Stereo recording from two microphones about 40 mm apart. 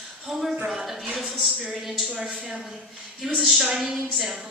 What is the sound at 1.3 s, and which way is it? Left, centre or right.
Speech, centre.